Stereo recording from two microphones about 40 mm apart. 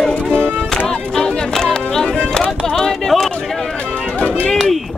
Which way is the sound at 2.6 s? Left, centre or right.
Centre.